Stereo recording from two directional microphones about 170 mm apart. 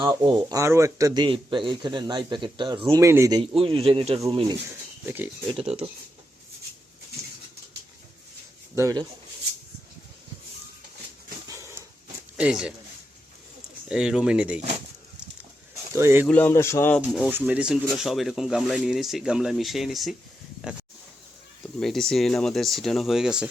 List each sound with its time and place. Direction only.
0.0 s speech: 25° right (ahead or behind)
3.0 s speech: 15° right (ahead or behind)
3.4 s speech: 35° right (ahead or behind)
8.7 s speech: 20° right (ahead or behind)
11.4 s a sound: 15° right (ahead or behind)
12.4 s speech: 5° right (ahead or behind)
13.8 s speech: 5° right (ahead or behind)
15.7 s a sound: 15° right (ahead or behind)
16.2 s speech: 10° left (ahead or behind)
17.3 s speech: 10° right (ahead or behind)
21.6 s speech: 5° left (ahead or behind)